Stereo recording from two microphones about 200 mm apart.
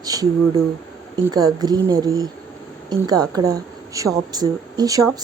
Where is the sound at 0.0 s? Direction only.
20° right (ahead or behind).